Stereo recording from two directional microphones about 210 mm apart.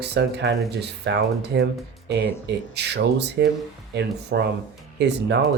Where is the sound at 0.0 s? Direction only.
55° right (ahead or behind).